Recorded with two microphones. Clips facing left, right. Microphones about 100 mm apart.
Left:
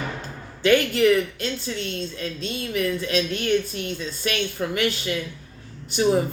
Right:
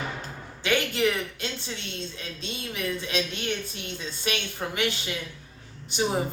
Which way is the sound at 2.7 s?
20° right (ahead or behind).